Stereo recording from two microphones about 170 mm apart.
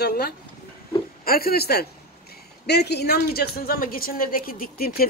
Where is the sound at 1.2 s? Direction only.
60° left (ahead or behind).